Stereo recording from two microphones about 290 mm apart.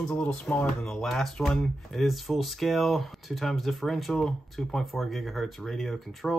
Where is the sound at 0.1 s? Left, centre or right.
Centre.